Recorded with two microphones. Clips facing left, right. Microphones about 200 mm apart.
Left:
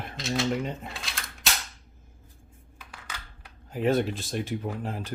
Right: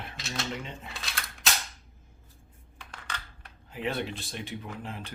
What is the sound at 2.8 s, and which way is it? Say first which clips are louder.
Computer keyboard: right 1 dB; 5° left (ahead or behind).